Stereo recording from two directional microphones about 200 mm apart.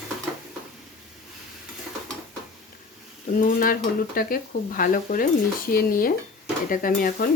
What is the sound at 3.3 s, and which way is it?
Speech, 45° left (ahead or behind).